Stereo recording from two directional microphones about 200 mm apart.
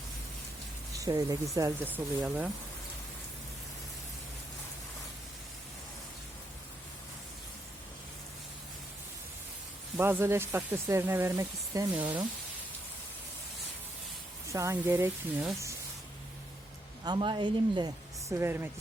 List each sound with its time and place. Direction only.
0.9 s speech: 15° right (ahead or behind)
10.0 s speech: 10° right (ahead or behind)
14.4 s speech: 15° right (ahead or behind)
17.0 s a woman's voice: 25° right (ahead or behind)